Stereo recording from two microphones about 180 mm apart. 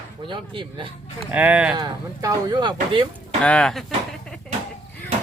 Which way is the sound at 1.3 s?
10° right (ahead or behind).